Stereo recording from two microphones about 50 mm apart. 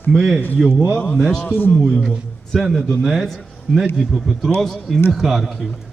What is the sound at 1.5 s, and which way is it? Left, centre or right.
Speech, left.